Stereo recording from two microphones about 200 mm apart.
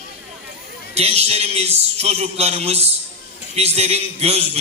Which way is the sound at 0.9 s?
30° right (ahead or behind).